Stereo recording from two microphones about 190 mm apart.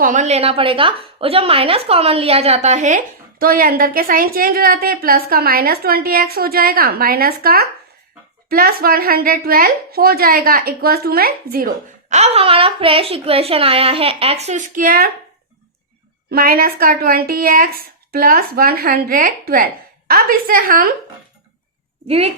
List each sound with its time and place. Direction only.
0.0 s speech: 40° right (ahead or behind)
16.3 s speech: 50° right (ahead or behind)
22.0 s speech: 35° right (ahead or behind)